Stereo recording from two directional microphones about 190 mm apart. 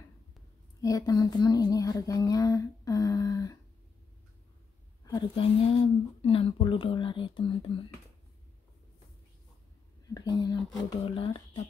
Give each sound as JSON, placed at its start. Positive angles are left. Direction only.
{"t": 0.7, "sound": "a woman's voice", "side_deg": 20}
{"t": 5.0, "sound": "a woman's voice", "side_deg": 25}
{"t": 10.1, "sound": "a woman's voice", "side_deg": 20}